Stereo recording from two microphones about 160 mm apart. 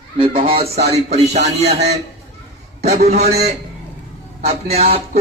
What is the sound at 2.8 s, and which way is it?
Speech, 45° right (ahead or behind).